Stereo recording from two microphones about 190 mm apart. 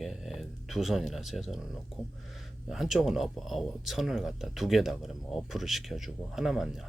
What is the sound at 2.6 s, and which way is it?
Speech, centre (ahead or behind).